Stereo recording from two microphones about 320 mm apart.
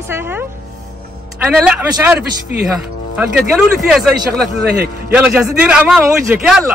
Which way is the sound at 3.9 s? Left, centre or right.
Centre.